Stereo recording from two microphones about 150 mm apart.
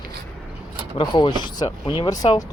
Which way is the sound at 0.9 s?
30° left (ahead or behind).